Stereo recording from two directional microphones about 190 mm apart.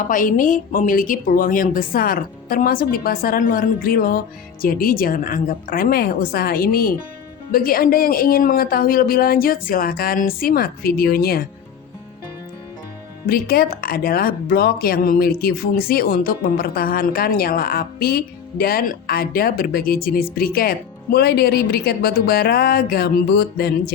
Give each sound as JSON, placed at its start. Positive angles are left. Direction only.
{"t": 0.0, "sound": "speech", "side_deg": 45}
{"t": 13.2, "sound": "speech", "side_deg": 50}